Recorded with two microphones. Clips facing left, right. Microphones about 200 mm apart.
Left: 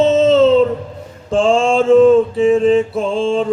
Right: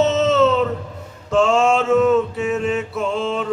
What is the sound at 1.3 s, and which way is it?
Mantra, 30° left (ahead or behind).